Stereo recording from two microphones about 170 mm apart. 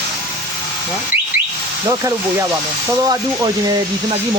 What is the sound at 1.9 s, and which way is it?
Speech, 20° right (ahead or behind).